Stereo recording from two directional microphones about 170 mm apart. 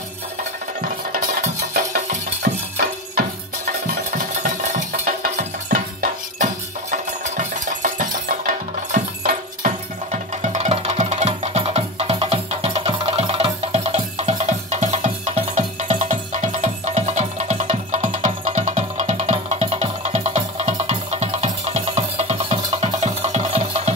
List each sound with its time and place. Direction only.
0.7 s music: 55° right (ahead or behind)
2.4 s music: 70° right (ahead or behind)
4.1 s music: 45° right (ahead or behind)
10.4 s music: 40° right (ahead or behind)